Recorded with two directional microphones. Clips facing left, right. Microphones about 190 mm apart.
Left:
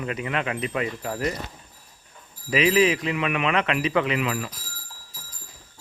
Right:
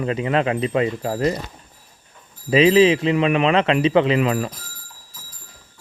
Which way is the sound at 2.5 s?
30° right (ahead or behind).